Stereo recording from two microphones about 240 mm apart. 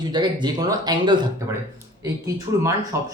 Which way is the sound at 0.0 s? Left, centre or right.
Centre.